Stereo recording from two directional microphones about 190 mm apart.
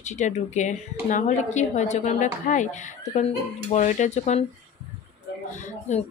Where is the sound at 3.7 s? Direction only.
40° left (ahead or behind).